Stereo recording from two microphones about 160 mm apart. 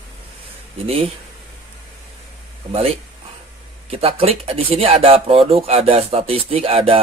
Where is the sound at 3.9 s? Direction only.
35° right (ahead or behind).